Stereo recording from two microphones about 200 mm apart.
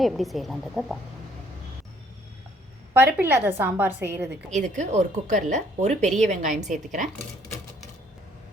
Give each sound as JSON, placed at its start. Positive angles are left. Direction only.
{"t": 0.0, "sound": "a woman's voice", "side_deg": 0}
{"t": 2.9, "sound": "a woman's voice", "side_deg": -10}
{"t": 4.5, "sound": "speech", "side_deg": -35}